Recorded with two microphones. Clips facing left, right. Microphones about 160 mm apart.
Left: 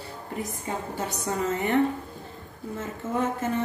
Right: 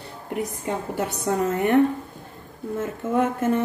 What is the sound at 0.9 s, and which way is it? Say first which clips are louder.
Speech: right 6 dB; 60° right (ahead or behind).